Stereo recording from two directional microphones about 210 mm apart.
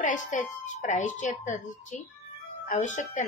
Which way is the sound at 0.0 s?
35° left (ahead or behind).